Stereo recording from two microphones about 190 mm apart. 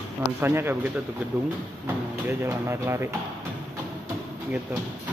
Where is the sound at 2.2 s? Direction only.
15° right (ahead or behind).